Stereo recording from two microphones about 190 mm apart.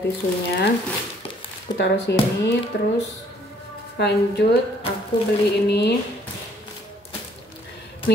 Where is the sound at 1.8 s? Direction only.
65° left (ahead or behind).